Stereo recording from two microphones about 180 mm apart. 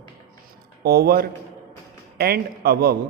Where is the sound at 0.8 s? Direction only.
60° right (ahead or behind).